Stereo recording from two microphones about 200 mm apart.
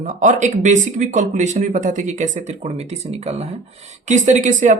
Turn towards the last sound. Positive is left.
turn(degrees=-40)  # may be behind; listen again after turning